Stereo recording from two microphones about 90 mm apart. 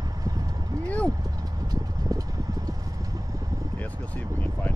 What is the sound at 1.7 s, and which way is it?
Vehicle, 45° right (ahead or behind).